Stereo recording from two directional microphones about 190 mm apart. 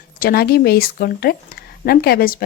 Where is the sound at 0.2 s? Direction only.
50° left (ahead or behind).